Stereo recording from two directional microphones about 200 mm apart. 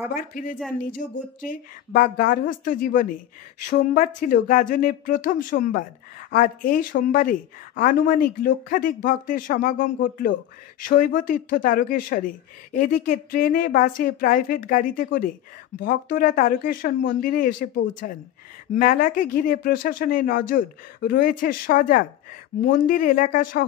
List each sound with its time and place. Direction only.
0.1 s speech: 45° left (ahead or behind)